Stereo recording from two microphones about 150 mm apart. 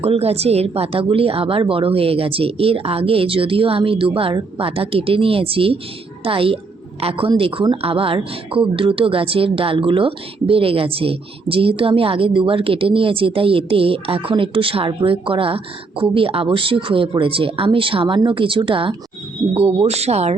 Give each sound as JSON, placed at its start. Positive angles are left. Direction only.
{"t": 0.0, "sound": "a woman's voice", "side_deg": -40}